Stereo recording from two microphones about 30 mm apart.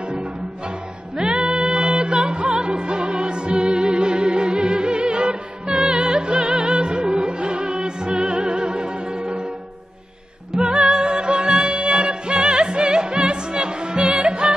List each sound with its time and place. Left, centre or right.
0.1 s music: right
10.5 s music: right